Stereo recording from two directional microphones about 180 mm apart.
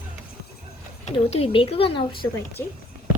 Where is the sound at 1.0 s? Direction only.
35° left (ahead or behind).